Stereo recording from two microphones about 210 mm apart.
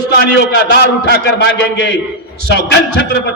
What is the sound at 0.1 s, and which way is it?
A man's voice, 50° left (ahead or behind).